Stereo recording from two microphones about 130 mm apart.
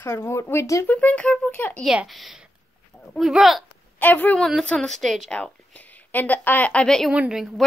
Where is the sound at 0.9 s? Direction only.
10° left (ahead or behind).